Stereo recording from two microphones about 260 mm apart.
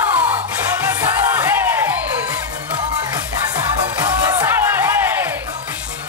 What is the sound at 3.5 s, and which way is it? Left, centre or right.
Music, centre.